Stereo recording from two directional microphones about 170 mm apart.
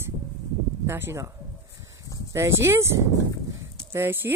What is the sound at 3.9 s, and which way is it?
Speech, 15° right (ahead or behind).